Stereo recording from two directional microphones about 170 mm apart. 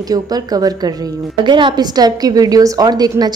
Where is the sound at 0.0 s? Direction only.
20° right (ahead or behind).